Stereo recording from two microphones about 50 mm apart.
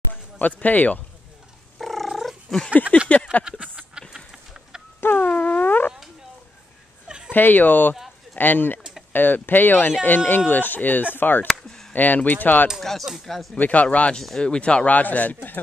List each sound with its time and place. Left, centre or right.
0.1 s speech: left
1.8 s cat: centre
3.1 s speech: left
3.4 s a sound: centre
4.3 s chicken: centre
5.0 s a sound: left
5.3 s wail: left
7.1 s a sound: centre
7.3 s speech: left
12.8 s speech: centre
13.6 s speech: left